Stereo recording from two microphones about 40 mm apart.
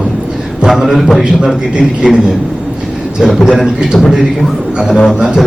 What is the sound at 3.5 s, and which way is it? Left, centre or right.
Speech, centre.